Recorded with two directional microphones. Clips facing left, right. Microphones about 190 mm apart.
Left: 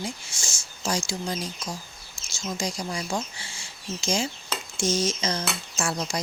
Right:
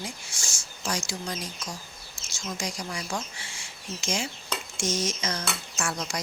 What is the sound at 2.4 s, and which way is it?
Speech, 30° left (ahead or behind).